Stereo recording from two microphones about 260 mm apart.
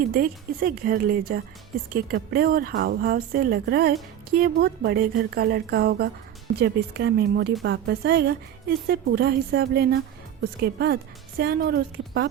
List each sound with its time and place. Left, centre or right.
0.1 s a woman's voice: right